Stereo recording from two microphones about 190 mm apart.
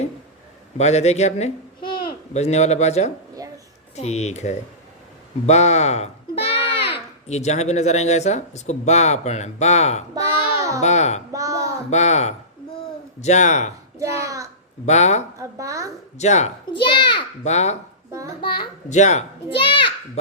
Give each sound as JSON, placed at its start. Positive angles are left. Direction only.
{"t": 0.8, "sound": "speech", "side_deg": 35}
{"t": 5.5, "sound": "a sound", "side_deg": 35}
{"t": 7.3, "sound": "speech", "side_deg": 35}
{"t": 11.3, "sound": "a sound", "side_deg": -15}
{"t": 11.9, "sound": "speech", "side_deg": 35}
{"t": 14.8, "sound": "speech", "side_deg": 35}
{"t": 15.4, "sound": "a child's voice", "side_deg": -15}
{"t": 16.1, "sound": "speech", "side_deg": 35}
{"t": 16.7, "sound": "a child's voice", "side_deg": 25}
{"t": 17.4, "sound": "speech", "side_deg": 35}
{"t": 18.4, "sound": "a child's voice", "side_deg": 25}
{"t": 18.9, "sound": "a child's voice", "side_deg": 40}